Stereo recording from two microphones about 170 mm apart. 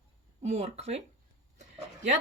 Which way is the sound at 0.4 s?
40° right (ahead or behind).